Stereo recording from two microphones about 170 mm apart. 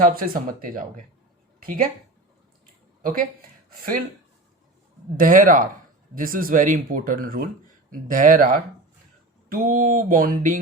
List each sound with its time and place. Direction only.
0.0 s speech: 55° right (ahead or behind)
3.0 s speech: 55° right (ahead or behind)
5.1 s speech: 55° right (ahead or behind)